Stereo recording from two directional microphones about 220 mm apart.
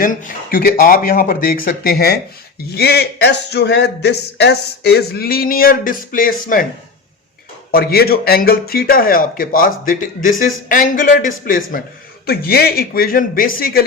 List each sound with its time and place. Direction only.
0.0 s a man's voice: 40° left (ahead or behind)
7.7 s a man's voice: 45° left (ahead or behind)